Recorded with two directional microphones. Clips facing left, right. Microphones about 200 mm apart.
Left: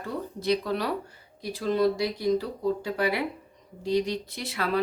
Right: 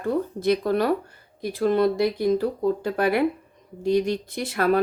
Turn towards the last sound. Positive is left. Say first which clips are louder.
# right 7 dB
turn(degrees=-50)  # may be behind; listen again after turning